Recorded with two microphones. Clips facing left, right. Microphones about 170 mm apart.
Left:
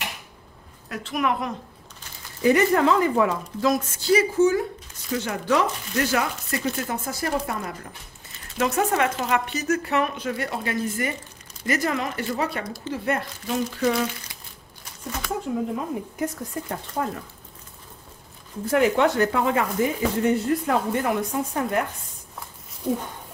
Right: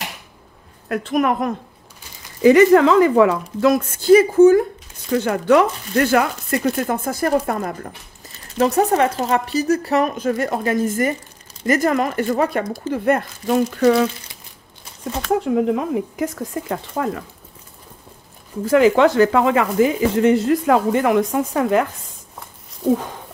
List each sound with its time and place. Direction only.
0.8 s speech: 55° right (ahead or behind)
2.4 s a woman's voice: 90° right; by 8.4 s 50° right (ahead or behind)
8.5 s speech: 35° right (ahead or behind); by 14.0 s 70° right (ahead or behind)
15.4 s speech: 80° right
18.7 s speech: 90° right